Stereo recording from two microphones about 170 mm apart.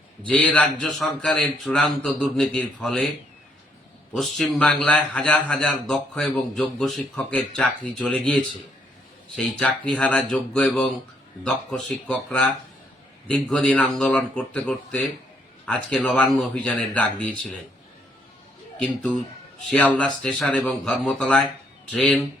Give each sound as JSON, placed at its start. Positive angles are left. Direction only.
{"t": 0.3, "sound": "a man's voice", "side_deg": 5}
{"t": 4.1, "sound": "a man's voice", "side_deg": 0}
{"t": 18.8, "sound": "a man's voice", "side_deg": 5}